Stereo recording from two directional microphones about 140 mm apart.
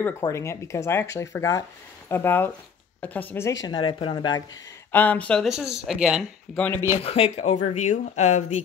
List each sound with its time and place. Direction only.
0.2 s a woman's voice: 20° left (ahead or behind)
3.6 s speech: 35° left (ahead or behind)
4.9 s a woman's voice: 10° left (ahead or behind)
5.5 s speech: 5° right (ahead or behind)
6.5 s a woman's voice: 10° left (ahead or behind)
7.0 s speech: 45° left (ahead or behind)